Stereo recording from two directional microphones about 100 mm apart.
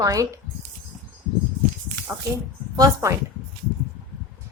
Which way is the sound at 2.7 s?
35° right (ahead or behind).